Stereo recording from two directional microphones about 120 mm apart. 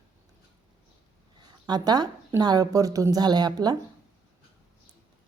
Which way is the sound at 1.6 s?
35° right (ahead or behind).